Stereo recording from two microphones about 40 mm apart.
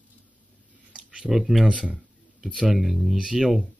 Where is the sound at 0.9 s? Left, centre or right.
Right.